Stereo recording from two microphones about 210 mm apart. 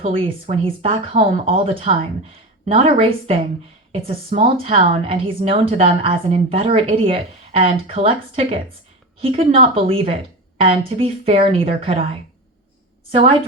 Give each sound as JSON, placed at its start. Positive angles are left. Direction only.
{"t": 0.0, "sound": "a woman's voice", "side_deg": -25}